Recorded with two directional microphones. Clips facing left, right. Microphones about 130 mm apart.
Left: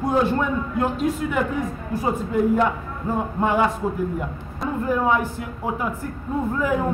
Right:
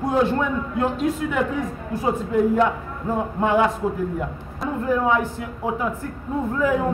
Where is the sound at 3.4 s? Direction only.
Centre (ahead or behind).